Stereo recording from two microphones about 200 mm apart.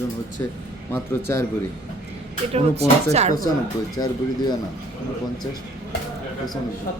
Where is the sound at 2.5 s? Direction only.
30° right (ahead or behind).